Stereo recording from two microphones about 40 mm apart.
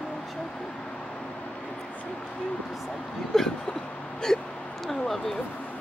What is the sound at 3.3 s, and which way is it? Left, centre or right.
Speech, centre.